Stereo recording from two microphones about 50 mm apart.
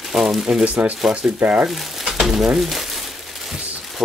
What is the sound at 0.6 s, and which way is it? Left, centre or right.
Speech, right.